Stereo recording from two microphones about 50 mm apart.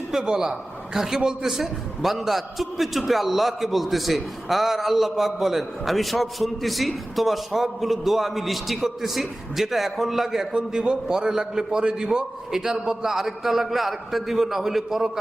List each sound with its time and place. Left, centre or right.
0.1 s a man's voice: centre